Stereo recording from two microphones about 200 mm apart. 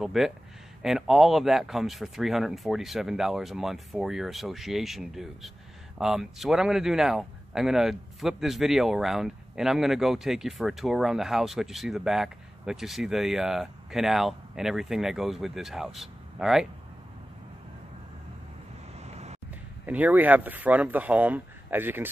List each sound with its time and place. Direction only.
0.0 s a man's voice: centre (ahead or behind)
18.9 s vehicle: 35° right (ahead or behind)
19.9 s speech: 10° right (ahead or behind)